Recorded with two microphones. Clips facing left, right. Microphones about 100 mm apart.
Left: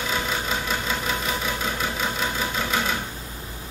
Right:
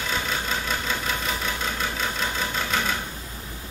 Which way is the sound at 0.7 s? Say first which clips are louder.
Left 1 dB; 5° left (ahead or behind).